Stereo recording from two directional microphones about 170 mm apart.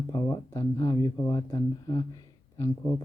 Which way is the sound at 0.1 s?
25° left (ahead or behind).